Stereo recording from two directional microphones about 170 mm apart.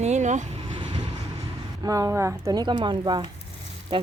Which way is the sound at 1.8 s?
20° right (ahead or behind).